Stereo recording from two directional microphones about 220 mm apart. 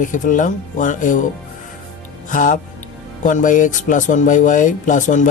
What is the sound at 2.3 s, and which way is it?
Speech, 35° left (ahead or behind).